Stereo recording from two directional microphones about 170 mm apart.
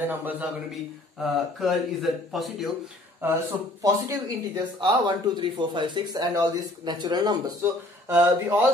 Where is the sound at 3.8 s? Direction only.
20° right (ahead or behind).